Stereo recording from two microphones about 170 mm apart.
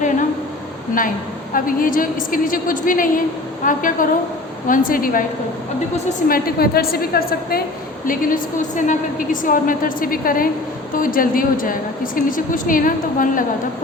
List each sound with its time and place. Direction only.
1.5 s a woman's voice: 55° left (ahead or behind)
6.2 s a woman's voice: 60° left (ahead or behind)